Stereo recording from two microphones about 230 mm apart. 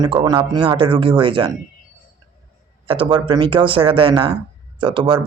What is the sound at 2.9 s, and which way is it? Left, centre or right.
Speech, right.